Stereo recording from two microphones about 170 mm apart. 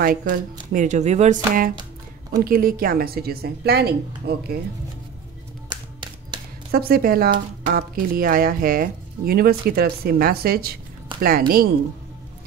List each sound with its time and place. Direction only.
0.0 s speech: 60° right (ahead or behind)
2.3 s speech: 60° right (ahead or behind)
6.7 s speech: 60° right (ahead or behind)
7.3 s speech: 70° right (ahead or behind)